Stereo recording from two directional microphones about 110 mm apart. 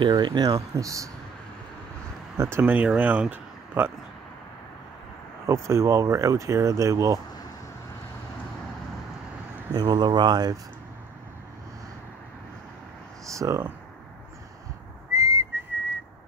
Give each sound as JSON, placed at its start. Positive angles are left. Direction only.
{"t": 0.1, "sound": "speech", "side_deg": -40}
{"t": 2.3, "sound": "speech", "side_deg": -25}
{"t": 2.6, "sound": "speech", "side_deg": -15}
{"t": 5.5, "sound": "speech", "side_deg": -25}
{"t": 9.7, "sound": "speech", "side_deg": -40}
{"t": 13.3, "sound": "speech", "side_deg": -30}
{"t": 15.1, "sound": "whistling", "side_deg": -30}